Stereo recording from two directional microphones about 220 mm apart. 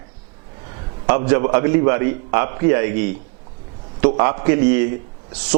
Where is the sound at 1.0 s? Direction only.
15° right (ahead or behind).